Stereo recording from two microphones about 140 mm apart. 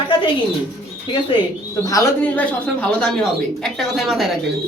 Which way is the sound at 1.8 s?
25° left (ahead or behind).